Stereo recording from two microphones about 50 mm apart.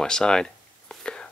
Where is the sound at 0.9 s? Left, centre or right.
Centre.